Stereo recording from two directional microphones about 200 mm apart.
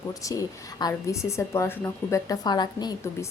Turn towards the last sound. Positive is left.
turn(degrees=20)  # may be behind; listen again after turning